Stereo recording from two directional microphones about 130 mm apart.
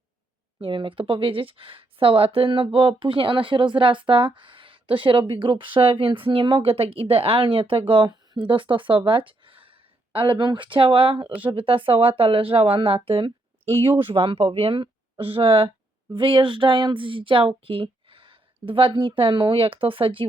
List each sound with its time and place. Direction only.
0.6 s speech: 40° right (ahead or behind)